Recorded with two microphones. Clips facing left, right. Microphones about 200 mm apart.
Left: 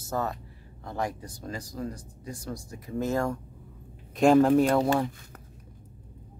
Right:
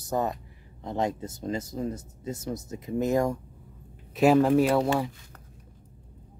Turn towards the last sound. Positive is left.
turn(degrees=0)  # may be behind; listen again after turning